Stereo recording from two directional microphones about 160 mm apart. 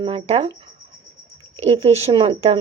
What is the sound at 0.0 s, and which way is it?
Speech, 40° right (ahead or behind).